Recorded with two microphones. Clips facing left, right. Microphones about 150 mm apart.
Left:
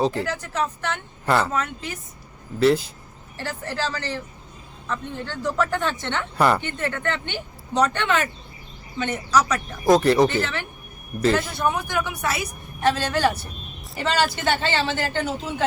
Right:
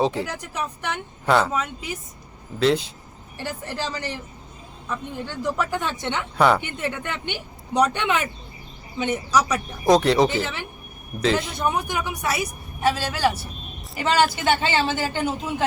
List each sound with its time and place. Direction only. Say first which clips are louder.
0.0 s speech: even; centre (ahead or behind)
0.3 s speech: left 4 dB; 15° right (ahead or behind)
1.2 s speech: right 2 dB; centre (ahead or behind)
1.5 s speech: even; 10° right (ahead or behind)
2.6 s speech: left 2 dB; 5° left (ahead or behind)
3.3 s speech: left 1 dB; 15° right (ahead or behind)
6.3 s speech: right 1 dB; centre (ahead or behind)
6.6 s speech: left 1 dB; 10° right (ahead or behind)
9.8 s speech: left 1 dB; centre (ahead or behind)
10.2 s speech: left 1 dB; 10° right (ahead or behind)
14.4 s speech: right 2 dB; 10° right (ahead or behind)